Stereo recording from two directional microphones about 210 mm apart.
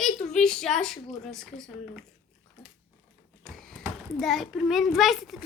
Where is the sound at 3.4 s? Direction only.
Centre (ahead or behind).